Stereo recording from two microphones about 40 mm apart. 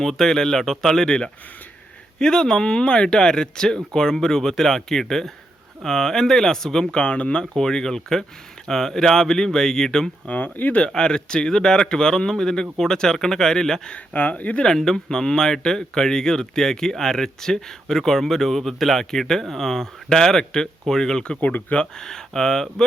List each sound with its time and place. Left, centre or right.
0.0 s speech: centre
6.9 s speech: left
7.5 s speech: centre
10.2 s speech: left
10.8 s speech: left
13.9 s speech: left
14.9 s speech: centre
21.4 s speech: left
21.8 s speech: centre